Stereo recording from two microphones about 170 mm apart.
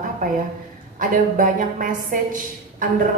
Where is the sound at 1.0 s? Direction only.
50° right (ahead or behind).